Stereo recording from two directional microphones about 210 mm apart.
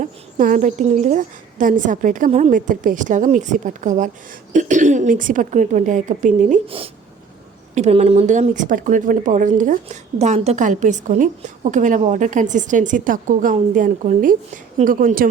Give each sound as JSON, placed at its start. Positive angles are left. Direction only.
{"t": 0.0, "sound": "speech", "side_deg": -40}